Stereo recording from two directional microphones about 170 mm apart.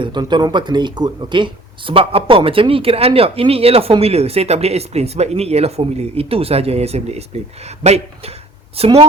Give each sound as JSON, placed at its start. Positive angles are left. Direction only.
{"t": 0.0, "sound": "speech", "side_deg": -25}